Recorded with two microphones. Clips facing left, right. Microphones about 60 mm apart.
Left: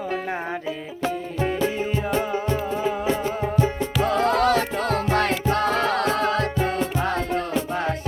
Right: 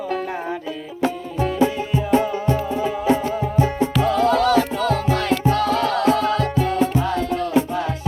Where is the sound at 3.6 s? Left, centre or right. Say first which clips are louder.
Right 5 dB; right.